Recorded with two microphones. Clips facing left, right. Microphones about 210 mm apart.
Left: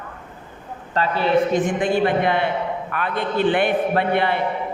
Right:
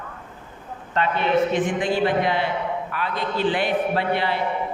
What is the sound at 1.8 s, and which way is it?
A man's voice, 55° left (ahead or behind).